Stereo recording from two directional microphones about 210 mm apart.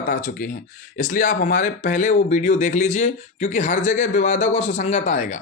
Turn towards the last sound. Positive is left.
turn(degrees=35)  # may be behind; listen again after turning